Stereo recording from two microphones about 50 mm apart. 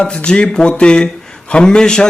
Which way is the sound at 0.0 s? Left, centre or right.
Left.